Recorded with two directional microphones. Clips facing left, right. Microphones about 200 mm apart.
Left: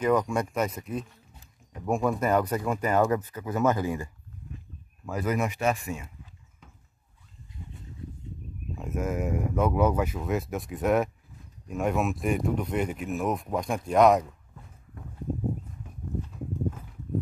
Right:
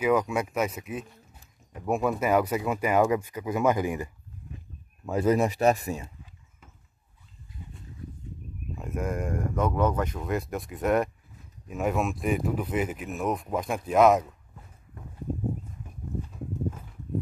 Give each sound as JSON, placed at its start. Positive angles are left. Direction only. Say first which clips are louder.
{"t": 0.0, "sound": "speech", "louder": "even", "side_deg": -5}
{"t": 8.7, "sound": "speech", "louder": "left 1 dB", "side_deg": 0}